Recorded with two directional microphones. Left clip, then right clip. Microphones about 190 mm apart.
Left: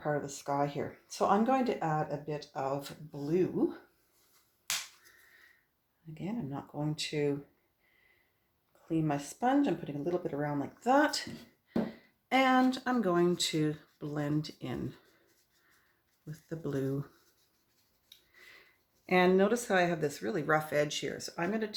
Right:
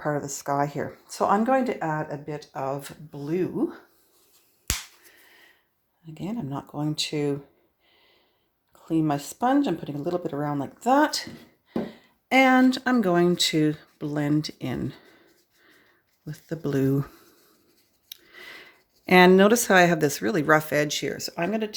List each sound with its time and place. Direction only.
0.0 s speech: 40° right (ahead or behind)
6.1 s speech: 40° right (ahead or behind)
8.9 s speech: 40° right (ahead or behind)
16.2 s speech: 40° right (ahead or behind)
18.1 s speech: 55° right (ahead or behind); by 21.8 s 40° right (ahead or behind)